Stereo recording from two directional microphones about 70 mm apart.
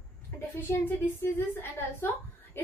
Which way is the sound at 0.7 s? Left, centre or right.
Left.